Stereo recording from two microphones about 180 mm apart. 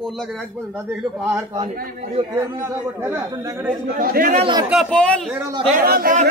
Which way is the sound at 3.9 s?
50° right (ahead or behind).